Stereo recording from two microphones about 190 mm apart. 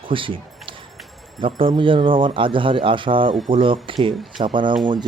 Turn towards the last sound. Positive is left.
turn(degrees=-25)  # may be behind; listen again after turning